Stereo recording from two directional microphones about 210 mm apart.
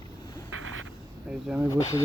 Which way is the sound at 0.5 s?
75° right (ahead or behind).